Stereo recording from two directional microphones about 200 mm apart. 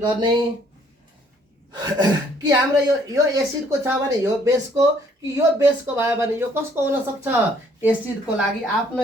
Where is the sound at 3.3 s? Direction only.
15° right (ahead or behind).